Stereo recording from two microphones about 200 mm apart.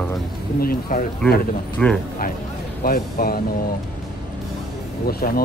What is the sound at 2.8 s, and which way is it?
Speech, 45° left (ahead or behind).